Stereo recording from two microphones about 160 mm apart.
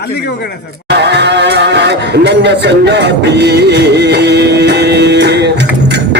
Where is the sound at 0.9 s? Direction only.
90° right.